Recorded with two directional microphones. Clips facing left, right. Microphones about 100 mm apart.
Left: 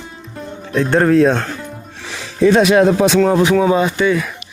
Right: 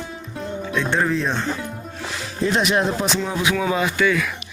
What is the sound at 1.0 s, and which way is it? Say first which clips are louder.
Speech: left 10 dB; 60° left (ahead or behind).